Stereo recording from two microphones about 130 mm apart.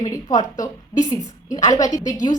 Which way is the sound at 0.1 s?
25° left (ahead or behind).